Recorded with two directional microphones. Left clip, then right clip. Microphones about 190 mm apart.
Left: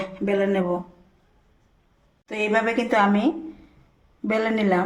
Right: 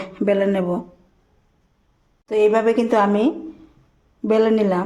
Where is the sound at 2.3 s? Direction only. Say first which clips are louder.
Right 6 dB; 50° right (ahead or behind).